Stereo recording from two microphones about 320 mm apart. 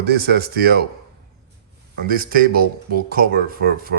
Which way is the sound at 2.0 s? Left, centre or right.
Right.